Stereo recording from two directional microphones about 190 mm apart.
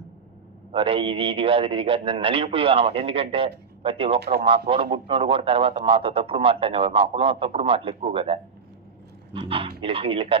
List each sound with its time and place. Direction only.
0.7 s a man's voice: 30° right (ahead or behind)